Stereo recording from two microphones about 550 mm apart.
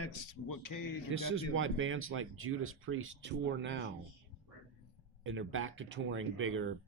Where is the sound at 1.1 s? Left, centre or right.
Right.